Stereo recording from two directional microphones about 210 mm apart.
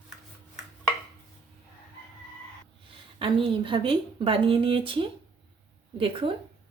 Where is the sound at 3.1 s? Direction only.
25° right (ahead or behind).